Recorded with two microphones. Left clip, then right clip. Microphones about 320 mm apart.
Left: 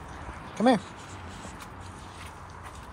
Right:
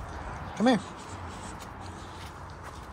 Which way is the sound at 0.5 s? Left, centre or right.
Centre.